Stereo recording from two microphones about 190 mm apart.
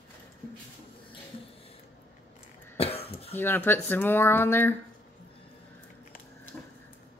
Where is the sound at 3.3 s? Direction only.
10° left (ahead or behind).